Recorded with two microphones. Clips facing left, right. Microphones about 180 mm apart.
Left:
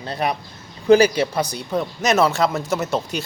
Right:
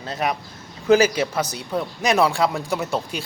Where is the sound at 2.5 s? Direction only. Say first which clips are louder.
Left 2 dB; 5° left (ahead or behind).